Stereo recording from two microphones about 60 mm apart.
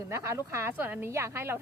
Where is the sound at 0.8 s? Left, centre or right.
Right.